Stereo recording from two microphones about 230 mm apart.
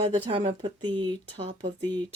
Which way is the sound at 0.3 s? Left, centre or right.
Right.